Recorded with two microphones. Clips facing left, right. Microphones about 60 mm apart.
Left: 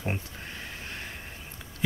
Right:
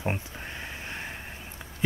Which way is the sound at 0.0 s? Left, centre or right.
Centre.